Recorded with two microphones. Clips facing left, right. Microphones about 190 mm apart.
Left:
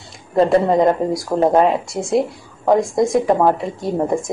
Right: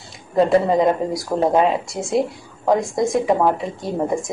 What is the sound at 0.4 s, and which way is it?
Speech, centre (ahead or behind).